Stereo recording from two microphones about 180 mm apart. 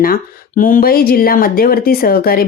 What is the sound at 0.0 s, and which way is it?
Speech, 50° left (ahead or behind).